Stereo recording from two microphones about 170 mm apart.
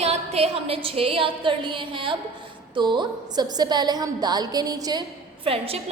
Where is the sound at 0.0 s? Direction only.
40° right (ahead or behind); by 5.0 s 25° right (ahead or behind).